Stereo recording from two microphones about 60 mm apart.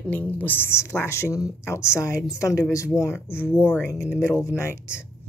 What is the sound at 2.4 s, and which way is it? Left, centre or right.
Speech, left.